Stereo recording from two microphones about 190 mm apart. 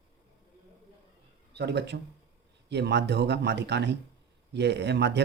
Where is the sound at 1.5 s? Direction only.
60° right (ahead or behind).